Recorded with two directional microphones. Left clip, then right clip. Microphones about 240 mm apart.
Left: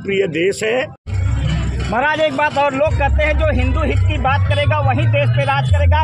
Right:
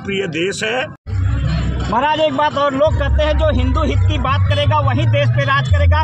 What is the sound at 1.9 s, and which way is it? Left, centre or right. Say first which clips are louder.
Speech: right 1 dB; centre.